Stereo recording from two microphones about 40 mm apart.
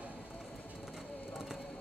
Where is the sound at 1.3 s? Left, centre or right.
Centre.